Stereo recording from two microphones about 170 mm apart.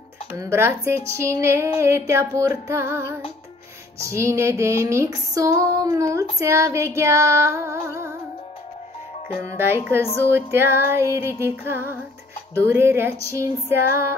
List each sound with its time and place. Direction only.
0.3 s music: 15° right (ahead or behind)
9.7 s music: 15° right (ahead or behind)